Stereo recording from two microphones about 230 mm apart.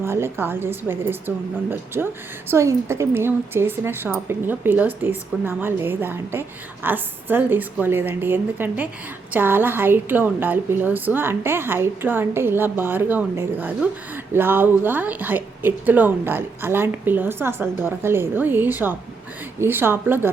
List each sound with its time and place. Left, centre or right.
0.0 s a woman's voice: centre